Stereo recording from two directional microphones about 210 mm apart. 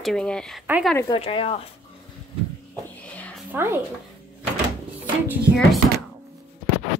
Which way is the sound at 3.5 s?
10° right (ahead or behind).